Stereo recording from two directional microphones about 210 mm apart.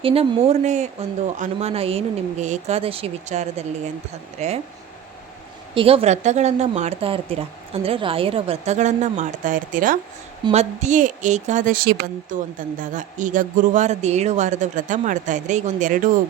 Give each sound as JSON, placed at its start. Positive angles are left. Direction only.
{"t": 0.0, "sound": "a woman's voice", "side_deg": -25}
{"t": 5.7, "sound": "a woman's voice", "side_deg": -25}